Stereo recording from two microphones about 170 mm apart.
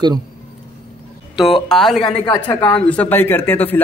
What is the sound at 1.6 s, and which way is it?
Speech, centre (ahead or behind).